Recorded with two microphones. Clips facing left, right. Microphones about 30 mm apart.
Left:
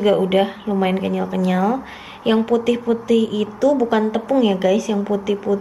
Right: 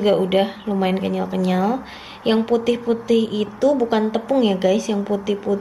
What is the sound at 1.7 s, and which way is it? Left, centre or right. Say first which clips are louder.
Speech: left 1 dB; right.